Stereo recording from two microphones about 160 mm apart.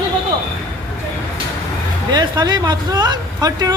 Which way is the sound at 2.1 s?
25° right (ahead or behind).